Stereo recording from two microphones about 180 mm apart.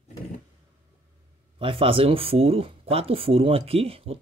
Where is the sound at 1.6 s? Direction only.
30° right (ahead or behind).